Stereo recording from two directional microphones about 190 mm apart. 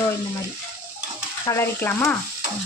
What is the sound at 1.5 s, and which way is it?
Speech, 10° left (ahead or behind).